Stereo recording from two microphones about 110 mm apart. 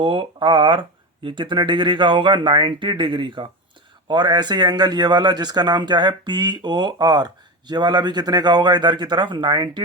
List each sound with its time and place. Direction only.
0.0 s speech: 50° right (ahead or behind)